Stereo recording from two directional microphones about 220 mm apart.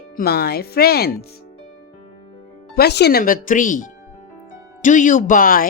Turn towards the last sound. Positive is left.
turn(degrees=40)  # may be behind; listen again after turning